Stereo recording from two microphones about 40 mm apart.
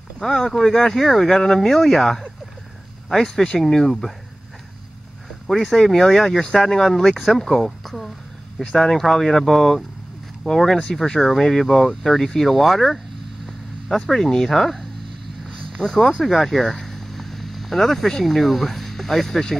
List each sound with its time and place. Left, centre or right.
0.2 s speech: centre
5.5 s speech: centre